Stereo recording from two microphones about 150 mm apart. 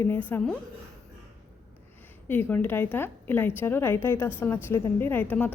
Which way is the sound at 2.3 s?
15° left (ahead or behind).